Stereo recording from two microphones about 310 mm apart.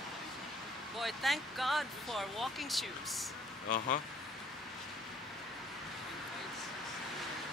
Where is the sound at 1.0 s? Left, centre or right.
Centre.